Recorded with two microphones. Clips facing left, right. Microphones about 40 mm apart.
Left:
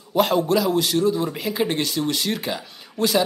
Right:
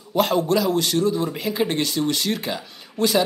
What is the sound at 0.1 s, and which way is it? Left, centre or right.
A man's voice, centre.